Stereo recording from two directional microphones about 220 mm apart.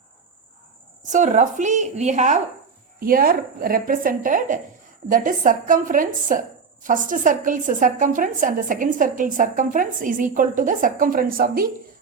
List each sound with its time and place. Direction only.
1.1 s a woman's voice: 35° right (ahead or behind)